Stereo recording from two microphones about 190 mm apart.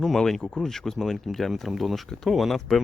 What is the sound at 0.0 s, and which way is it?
A man's voice, centre (ahead or behind).